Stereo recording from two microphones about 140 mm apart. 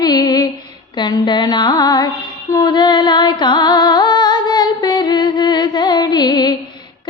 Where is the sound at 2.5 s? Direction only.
30° left (ahead or behind).